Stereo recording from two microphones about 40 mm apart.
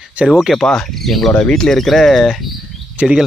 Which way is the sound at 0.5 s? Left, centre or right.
Centre.